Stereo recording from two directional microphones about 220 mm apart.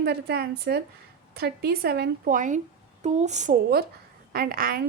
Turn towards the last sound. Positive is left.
turn(degrees=-40)  # may be behind; listen again after turning